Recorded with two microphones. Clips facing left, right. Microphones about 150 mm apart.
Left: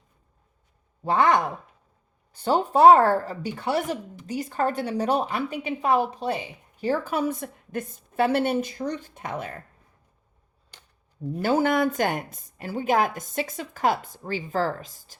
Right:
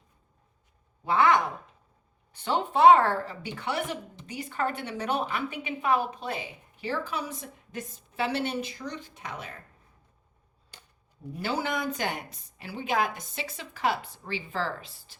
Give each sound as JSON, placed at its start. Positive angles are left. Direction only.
{"t": 1.0, "sound": "a woman's voice", "side_deg": 40}
{"t": 11.4, "sound": "a woman's voice", "side_deg": 50}